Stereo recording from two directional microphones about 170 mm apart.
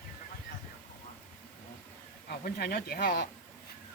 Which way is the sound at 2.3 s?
65° left (ahead or behind).